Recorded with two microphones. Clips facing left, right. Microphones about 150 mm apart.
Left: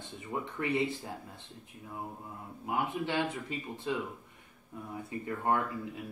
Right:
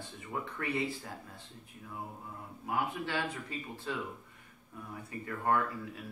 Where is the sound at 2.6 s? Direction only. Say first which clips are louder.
Left 2 dB; 20° left (ahead or behind).